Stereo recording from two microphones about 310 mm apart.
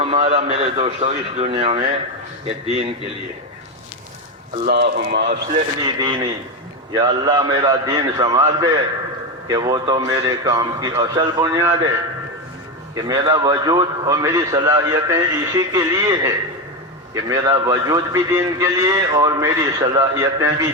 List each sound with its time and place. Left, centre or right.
0.0 s a man's voice: centre
4.5 s speech: right
5.5 s a man's voice: centre
13.0 s a man's voice: centre